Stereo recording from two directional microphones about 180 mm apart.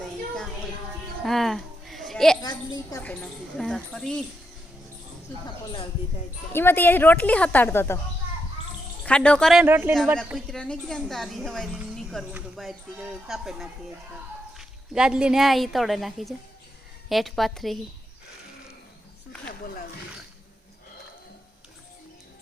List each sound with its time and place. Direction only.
1.2 s a sound: centre (ahead or behind)
2.4 s speech: 20° left (ahead or behind)
3.0 s a woman's voice: 5° left (ahead or behind)
6.5 s speech: 15° left (ahead or behind)
9.0 s a woman's voice: 5° left (ahead or behind)
9.6 s speech: 10° right (ahead or behind)
10.2 s a woman's voice: centre (ahead or behind)
14.9 s a woman's voice: 5° right (ahead or behind)